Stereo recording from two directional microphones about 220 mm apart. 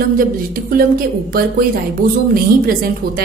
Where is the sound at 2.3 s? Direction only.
40° right (ahead or behind).